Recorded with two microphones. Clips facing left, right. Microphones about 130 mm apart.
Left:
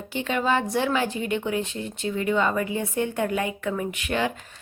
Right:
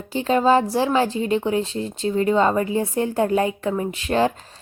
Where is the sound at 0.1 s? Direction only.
35° right (ahead or behind).